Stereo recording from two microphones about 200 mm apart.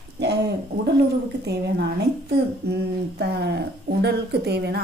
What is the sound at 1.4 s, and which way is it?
Speech, 55° right (ahead or behind).